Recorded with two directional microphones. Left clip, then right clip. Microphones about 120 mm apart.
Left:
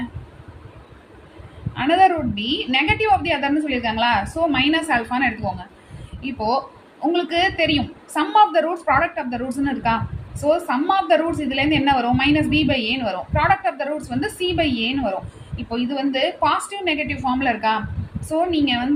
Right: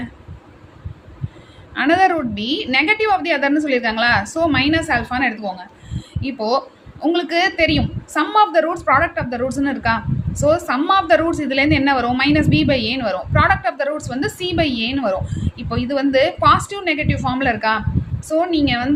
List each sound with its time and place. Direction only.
1.7 s a woman's voice: 40° right (ahead or behind)
6.2 s a woman's voice: 35° right (ahead or behind)